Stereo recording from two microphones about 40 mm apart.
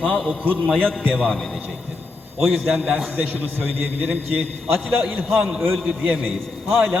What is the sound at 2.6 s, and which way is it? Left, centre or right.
Speech, centre.